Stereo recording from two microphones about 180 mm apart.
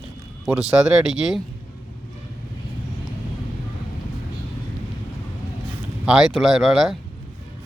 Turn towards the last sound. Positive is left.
turn(degrees=0)  # may be behind; listen again after turning